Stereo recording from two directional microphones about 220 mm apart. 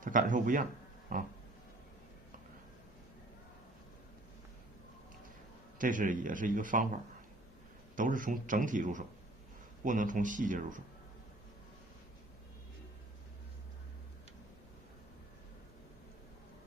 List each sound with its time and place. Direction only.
0.0 s a man's voice: 35° right (ahead or behind)
5.8 s a man's voice: 35° right (ahead or behind)